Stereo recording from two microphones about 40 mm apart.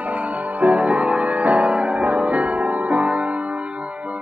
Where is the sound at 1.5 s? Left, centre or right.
Right.